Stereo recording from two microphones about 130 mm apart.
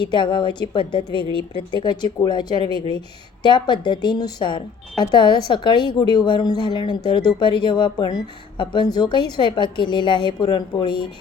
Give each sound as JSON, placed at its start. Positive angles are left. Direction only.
{"t": 0.0, "sound": "speech", "side_deg": 40}